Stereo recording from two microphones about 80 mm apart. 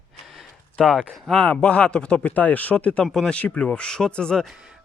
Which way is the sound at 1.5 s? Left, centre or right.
Centre.